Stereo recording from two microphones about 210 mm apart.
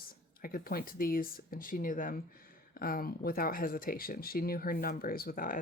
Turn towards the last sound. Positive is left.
turn(degrees=45)  # may be behind; listen again after turning